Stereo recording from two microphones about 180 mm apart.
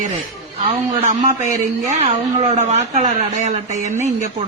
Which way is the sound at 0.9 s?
45° right (ahead or behind).